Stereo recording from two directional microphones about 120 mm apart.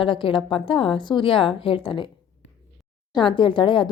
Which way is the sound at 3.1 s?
40° left (ahead or behind).